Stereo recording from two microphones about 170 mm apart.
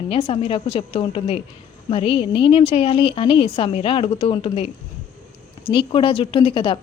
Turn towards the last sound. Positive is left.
turn(degrees=30)  # may be behind; listen again after turning